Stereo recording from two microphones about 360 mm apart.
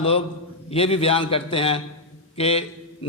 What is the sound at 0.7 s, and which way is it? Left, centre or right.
A man's voice, centre.